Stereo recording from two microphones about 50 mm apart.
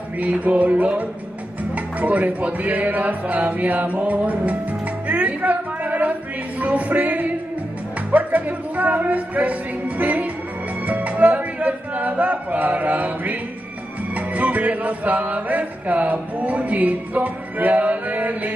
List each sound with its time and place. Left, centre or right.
0.2 s music: right